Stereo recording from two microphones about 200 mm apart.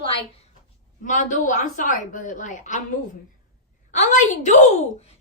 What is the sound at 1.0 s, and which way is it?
A woman's voice, 35° left (ahead or behind).